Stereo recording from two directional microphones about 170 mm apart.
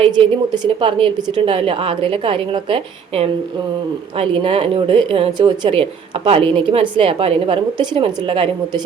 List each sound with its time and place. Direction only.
0.0 s speech: 30° right (ahead or behind)